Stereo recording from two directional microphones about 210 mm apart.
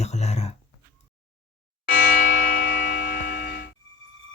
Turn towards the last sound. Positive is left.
turn(degrees=45)  # may be behind; listen again after turning